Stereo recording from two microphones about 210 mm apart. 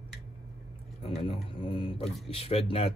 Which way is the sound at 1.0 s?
25° left (ahead or behind).